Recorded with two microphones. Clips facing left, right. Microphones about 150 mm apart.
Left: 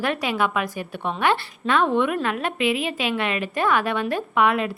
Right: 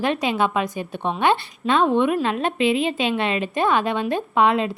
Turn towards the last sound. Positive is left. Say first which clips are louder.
# right 2 dB
turn(degrees=-25)  # may be behind; listen again after turning